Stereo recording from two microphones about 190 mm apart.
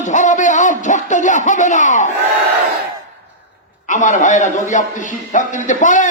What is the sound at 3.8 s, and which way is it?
A man's voice, 40° left (ahead or behind).